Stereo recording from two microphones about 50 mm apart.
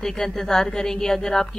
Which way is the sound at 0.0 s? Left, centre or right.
Centre.